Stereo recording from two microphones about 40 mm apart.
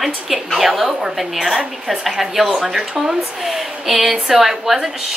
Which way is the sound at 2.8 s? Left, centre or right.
Centre.